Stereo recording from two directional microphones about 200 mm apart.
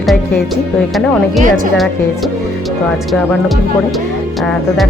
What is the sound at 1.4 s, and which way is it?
Speech, 40° right (ahead or behind).